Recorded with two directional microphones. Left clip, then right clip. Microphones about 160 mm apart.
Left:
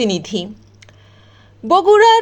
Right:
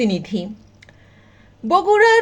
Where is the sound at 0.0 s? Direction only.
50° left (ahead or behind).